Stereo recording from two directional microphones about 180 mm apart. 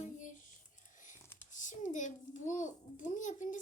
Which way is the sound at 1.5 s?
45° left (ahead or behind).